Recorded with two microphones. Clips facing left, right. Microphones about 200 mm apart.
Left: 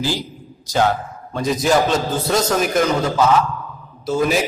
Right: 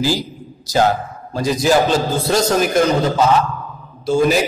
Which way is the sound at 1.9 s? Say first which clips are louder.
Right 2 dB; 30° right (ahead or behind).